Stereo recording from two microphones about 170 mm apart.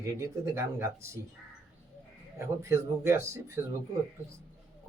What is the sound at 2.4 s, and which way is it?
Speech, 15° right (ahead or behind).